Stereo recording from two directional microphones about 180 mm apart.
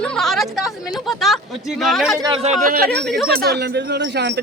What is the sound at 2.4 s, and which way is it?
Speech, 45° right (ahead or behind).